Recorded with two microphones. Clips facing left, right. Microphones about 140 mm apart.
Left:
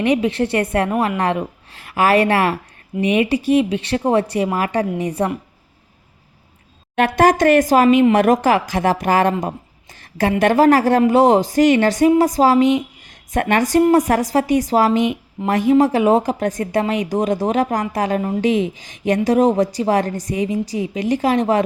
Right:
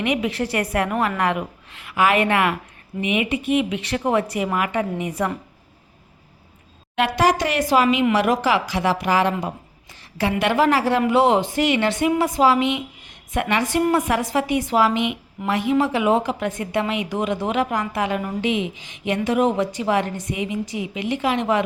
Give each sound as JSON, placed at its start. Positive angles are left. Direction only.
{"t": 0.0, "sound": "a woman's voice", "side_deg": 35}
{"t": 6.9, "sound": "a woman's voice", "side_deg": 50}